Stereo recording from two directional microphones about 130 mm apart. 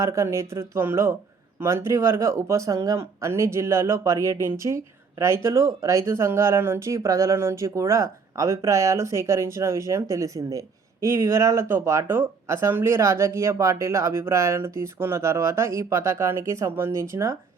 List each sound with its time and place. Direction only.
0.0 s speech: 20° right (ahead or behind)